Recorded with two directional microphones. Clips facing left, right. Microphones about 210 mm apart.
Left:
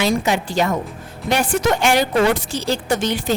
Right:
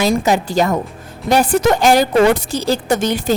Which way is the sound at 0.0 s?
40° right (ahead or behind).